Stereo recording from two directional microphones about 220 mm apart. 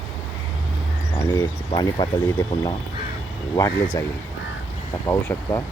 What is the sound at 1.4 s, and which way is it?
Speech, 20° left (ahead or behind).